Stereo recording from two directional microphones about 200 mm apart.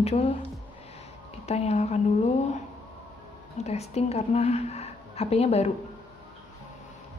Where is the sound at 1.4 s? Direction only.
30° left (ahead or behind).